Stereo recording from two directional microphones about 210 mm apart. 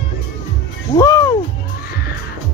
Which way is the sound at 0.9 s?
15° left (ahead or behind).